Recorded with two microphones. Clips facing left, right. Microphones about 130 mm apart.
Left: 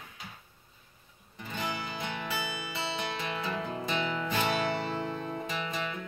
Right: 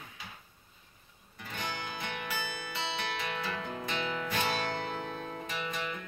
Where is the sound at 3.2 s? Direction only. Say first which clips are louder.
Left 2 dB; 25° left (ahead or behind).